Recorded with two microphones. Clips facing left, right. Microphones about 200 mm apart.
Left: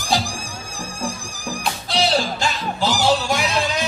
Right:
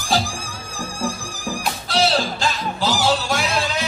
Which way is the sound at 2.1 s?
20° left (ahead or behind).